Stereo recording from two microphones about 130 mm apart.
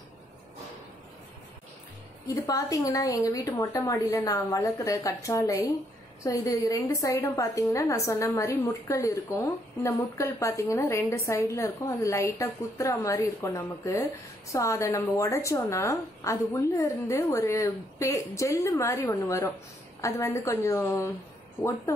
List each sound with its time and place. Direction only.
2.2 s a woman's voice: 25° left (ahead or behind)